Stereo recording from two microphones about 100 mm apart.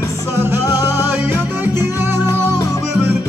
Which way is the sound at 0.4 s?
25° right (ahead or behind).